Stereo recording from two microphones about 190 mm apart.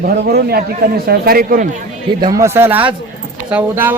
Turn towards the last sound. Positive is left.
turn(degrees=-10)  # may be behind; listen again after turning